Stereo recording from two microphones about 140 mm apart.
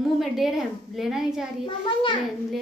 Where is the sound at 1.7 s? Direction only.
35° left (ahead or behind).